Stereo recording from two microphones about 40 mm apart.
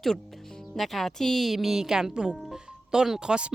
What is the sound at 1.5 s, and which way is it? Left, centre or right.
Speech, centre.